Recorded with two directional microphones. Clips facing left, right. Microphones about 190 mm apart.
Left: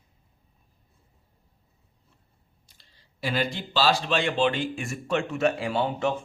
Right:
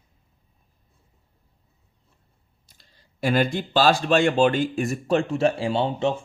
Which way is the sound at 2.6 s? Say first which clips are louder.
Right 6 dB; 45° right (ahead or behind).